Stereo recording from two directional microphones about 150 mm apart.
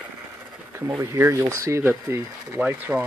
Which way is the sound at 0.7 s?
20° right (ahead or behind).